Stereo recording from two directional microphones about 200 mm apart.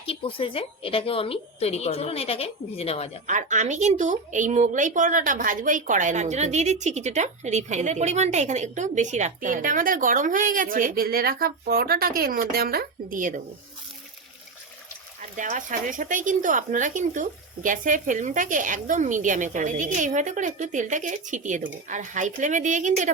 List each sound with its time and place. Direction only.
0.0 s a woman's voice: 25° left (ahead or behind)
3.2 s a woman's voice: 35° right (ahead or behind)
15.4 s a woman's voice: 40° right (ahead or behind)